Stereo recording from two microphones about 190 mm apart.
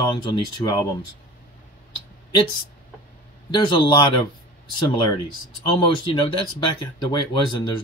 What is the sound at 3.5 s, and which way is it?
Speech, 25° left (ahead or behind).